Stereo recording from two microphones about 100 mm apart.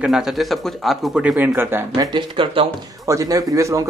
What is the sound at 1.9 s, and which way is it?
Speech, 50° right (ahead or behind).